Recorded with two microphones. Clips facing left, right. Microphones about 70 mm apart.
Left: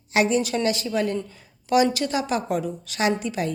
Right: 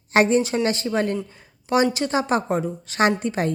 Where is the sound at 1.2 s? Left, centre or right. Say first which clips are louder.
Left 1 dB; right.